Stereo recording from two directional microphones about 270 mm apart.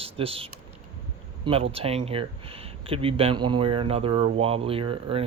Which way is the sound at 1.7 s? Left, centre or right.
Right.